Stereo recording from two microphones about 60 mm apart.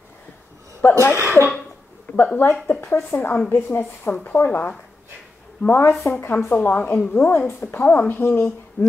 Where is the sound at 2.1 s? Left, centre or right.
Left.